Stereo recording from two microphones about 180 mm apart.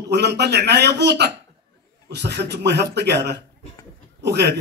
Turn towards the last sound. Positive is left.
turn(degrees=-65)  # may be behind; listen again after turning